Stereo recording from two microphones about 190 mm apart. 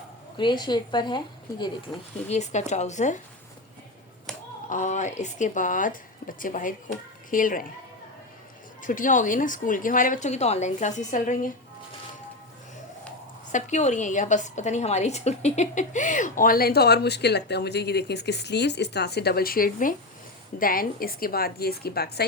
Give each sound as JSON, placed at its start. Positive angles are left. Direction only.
{"t": 0.3, "sound": "speech", "side_deg": 25}
{"t": 2.3, "sound": "speech", "side_deg": 35}
{"t": 4.7, "sound": "a woman's voice", "side_deg": 40}
{"t": 8.8, "sound": "a woman's voice", "side_deg": 45}
{"t": 13.5, "sound": "a woman's voice", "side_deg": 40}